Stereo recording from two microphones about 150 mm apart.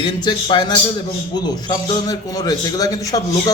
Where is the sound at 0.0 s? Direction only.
30° left (ahead or behind).